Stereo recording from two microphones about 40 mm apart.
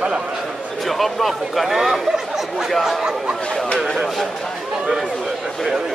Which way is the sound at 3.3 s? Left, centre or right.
Centre.